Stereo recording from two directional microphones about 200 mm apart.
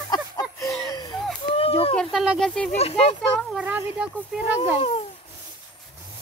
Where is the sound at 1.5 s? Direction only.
30° left (ahead or behind).